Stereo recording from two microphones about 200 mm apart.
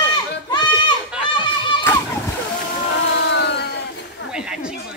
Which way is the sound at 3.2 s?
60° left (ahead or behind).